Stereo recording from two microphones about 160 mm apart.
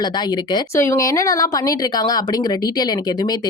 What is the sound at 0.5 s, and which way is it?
Speech, 15° left (ahead or behind).